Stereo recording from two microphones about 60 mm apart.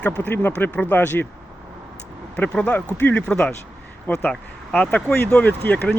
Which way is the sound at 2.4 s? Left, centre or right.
Left.